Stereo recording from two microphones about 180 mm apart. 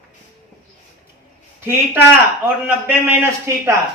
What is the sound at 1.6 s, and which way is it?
A man's voice, 10° right (ahead or behind).